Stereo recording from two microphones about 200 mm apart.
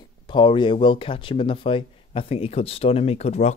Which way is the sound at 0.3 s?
25° left (ahead or behind).